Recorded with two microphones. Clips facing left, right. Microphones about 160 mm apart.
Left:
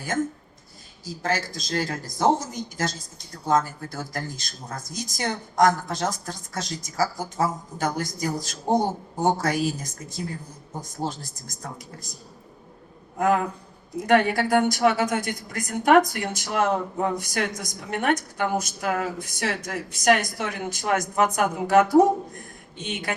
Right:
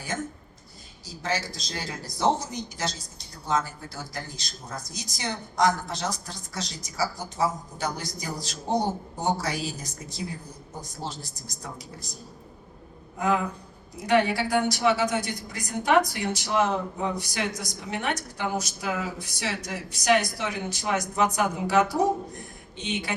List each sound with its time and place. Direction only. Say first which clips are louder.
1.0 s a woman's voice: left 3 dB; 50° left (ahead or behind)
13.1 s a man's voice: left 3 dB; 50° left (ahead or behind)